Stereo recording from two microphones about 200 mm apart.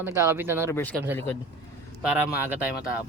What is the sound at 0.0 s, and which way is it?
Speech, 15° right (ahead or behind).